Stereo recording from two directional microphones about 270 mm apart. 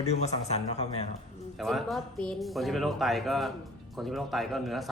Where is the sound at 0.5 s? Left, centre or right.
Left.